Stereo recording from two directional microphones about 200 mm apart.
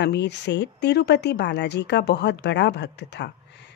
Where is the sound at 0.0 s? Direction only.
60° left (ahead or behind).